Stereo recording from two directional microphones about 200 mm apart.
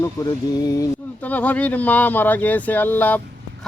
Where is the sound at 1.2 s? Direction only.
10° left (ahead or behind).